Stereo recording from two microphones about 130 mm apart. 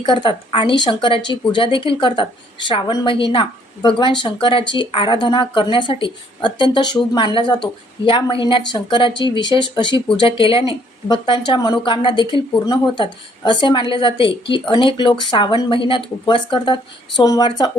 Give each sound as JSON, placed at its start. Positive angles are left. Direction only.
{"t": 0.0, "sound": "speech", "side_deg": 40}